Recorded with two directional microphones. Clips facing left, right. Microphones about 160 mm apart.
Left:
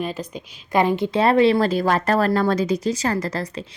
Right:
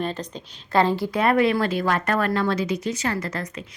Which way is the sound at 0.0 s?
10° left (ahead or behind).